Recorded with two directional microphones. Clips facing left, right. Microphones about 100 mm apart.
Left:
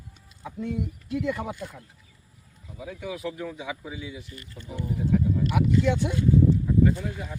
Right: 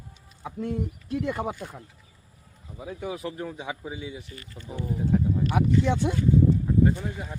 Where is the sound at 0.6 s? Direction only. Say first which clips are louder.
Right 1 dB; 45° right (ahead or behind).